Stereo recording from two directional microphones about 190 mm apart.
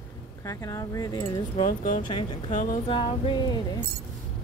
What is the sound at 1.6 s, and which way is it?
Speech, 45° left (ahead or behind).